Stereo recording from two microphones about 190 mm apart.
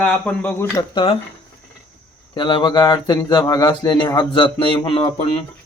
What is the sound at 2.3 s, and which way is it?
Speech, 25° left (ahead or behind).